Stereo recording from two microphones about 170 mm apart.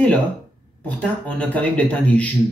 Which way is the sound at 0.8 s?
10° left (ahead or behind).